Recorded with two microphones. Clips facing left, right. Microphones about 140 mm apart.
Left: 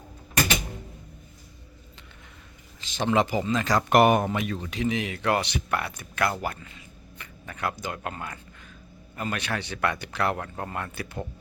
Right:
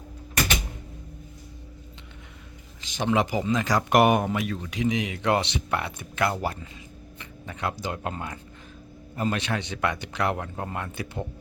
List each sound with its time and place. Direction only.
2.8 s speech: 15° right (ahead or behind)
4.3 s speech: centre (ahead or behind)
4.7 s speech: 15° right (ahead or behind)